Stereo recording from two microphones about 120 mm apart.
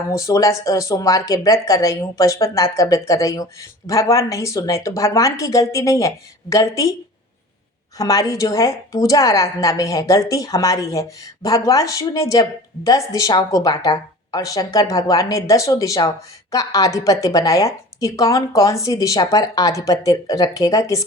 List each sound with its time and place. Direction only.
0.2 s speech: 25° left (ahead or behind)
7.9 s speech: 30° left (ahead or behind)